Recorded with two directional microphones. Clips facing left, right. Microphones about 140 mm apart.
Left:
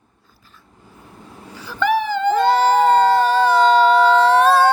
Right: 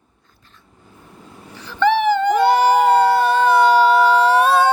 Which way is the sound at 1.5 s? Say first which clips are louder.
Right 4 dB; 10° left (ahead or behind).